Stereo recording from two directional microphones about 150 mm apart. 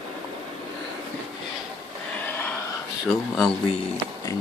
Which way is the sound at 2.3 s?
10° left (ahead or behind).